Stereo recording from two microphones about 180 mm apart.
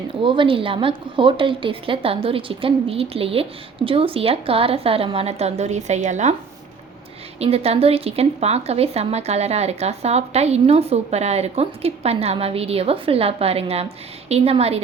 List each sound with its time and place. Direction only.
0.1 s a woman's voice: 25° right (ahead or behind)
7.3 s a woman's voice: 35° right (ahead or behind)